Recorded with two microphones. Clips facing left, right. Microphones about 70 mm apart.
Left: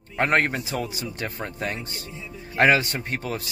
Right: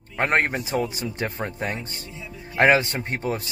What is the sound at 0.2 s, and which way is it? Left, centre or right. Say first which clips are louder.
A man's voice: even; centre.